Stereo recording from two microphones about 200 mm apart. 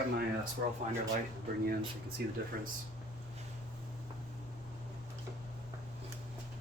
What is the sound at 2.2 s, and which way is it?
Speech, 55° right (ahead or behind).